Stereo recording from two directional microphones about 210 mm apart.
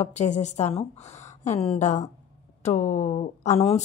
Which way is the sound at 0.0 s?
35° left (ahead or behind).